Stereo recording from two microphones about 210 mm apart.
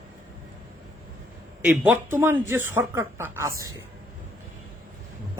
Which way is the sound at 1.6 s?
10° right (ahead or behind).